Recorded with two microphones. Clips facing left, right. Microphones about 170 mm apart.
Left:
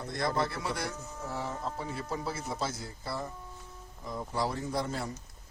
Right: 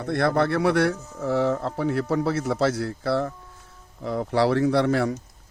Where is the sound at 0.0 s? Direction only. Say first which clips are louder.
Right 9 dB; 65° right (ahead or behind).